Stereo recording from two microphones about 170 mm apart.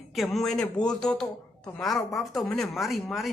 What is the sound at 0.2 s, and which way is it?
Speech, centre (ahead or behind).